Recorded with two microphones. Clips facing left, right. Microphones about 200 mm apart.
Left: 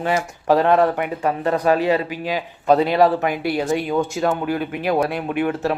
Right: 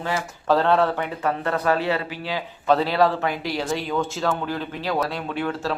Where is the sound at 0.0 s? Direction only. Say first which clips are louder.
Left 5 dB; 15° left (ahead or behind).